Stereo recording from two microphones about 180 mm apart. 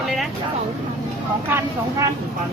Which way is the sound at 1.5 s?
15° right (ahead or behind).